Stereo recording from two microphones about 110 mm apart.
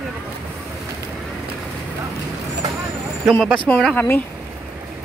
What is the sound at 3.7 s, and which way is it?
Speech, 5° left (ahead or behind).